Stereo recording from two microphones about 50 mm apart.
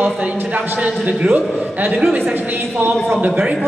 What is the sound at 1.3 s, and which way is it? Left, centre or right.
Speech, right.